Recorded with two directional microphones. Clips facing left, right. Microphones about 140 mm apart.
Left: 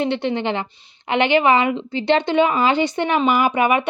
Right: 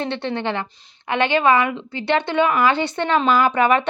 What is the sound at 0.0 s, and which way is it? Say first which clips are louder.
A woman's voice: left 3 dB; 15° left (ahead or behind).